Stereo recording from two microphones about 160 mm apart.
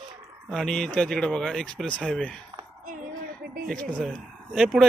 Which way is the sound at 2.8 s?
60° right (ahead or behind).